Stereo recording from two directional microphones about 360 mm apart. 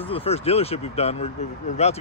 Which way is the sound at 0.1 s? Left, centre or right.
Centre.